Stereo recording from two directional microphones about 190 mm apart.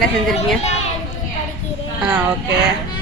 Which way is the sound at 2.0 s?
5° right (ahead or behind).